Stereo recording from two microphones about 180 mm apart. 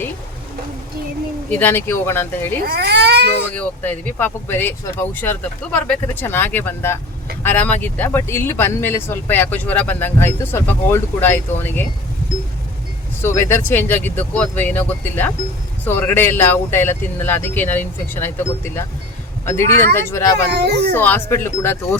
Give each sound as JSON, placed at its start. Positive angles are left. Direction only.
{"t": 1.5, "sound": "speech", "side_deg": 10}
{"t": 2.6, "sound": "speech", "side_deg": -60}
{"t": 3.5, "sound": "speech", "side_deg": 10}
{"t": 13.2, "sound": "speech", "side_deg": 15}
{"t": 20.5, "sound": "speech", "side_deg": -65}
{"t": 20.9, "sound": "speech", "side_deg": 10}